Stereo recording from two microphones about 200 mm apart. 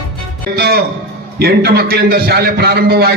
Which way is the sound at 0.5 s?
50° right (ahead or behind).